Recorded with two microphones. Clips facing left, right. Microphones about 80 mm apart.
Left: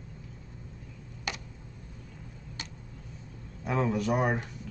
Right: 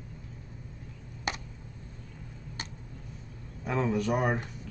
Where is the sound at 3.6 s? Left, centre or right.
Centre.